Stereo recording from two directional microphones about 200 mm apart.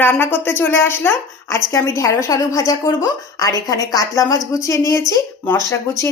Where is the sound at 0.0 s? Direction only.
10° left (ahead or behind).